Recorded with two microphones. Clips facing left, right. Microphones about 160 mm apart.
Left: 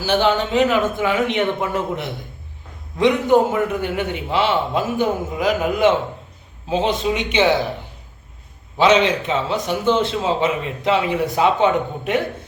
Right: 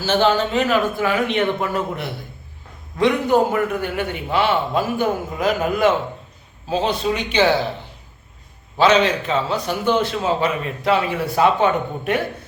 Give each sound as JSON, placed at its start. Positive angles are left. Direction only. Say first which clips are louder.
{"t": 0.0, "sound": "a man's voice", "louder": "even", "side_deg": 15}
{"t": 8.8, "sound": "a man's voice", "louder": "even", "side_deg": 25}